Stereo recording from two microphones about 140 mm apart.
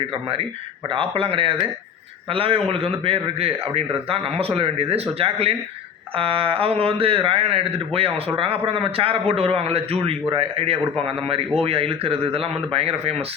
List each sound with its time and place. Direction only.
0.1 s a man's voice: 40° right (ahead or behind)